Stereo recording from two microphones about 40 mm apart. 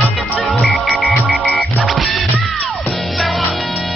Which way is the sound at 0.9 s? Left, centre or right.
Centre.